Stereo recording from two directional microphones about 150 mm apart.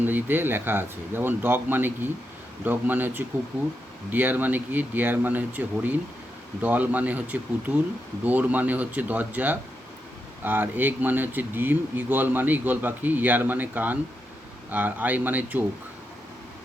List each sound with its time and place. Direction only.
0.0 s speech: 15° right (ahead or behind)